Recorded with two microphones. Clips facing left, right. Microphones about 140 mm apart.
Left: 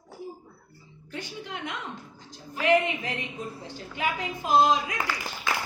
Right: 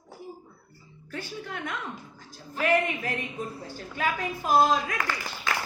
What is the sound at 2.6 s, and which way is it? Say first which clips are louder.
A woman's voice: left 2 dB; 20° left (ahead or behind).